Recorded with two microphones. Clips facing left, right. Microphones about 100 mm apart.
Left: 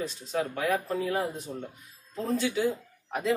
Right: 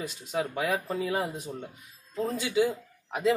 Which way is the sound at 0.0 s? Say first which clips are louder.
Left 1 dB; 10° right (ahead or behind).